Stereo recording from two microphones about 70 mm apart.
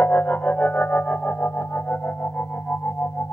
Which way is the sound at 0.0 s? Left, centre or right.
Left.